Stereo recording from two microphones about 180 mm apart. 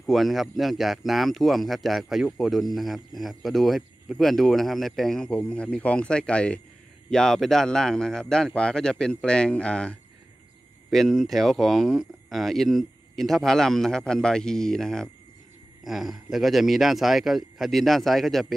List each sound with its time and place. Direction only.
0.0 s speech: centre (ahead or behind)